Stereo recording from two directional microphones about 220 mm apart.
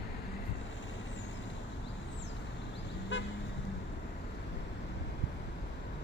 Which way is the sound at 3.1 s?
55° left (ahead or behind).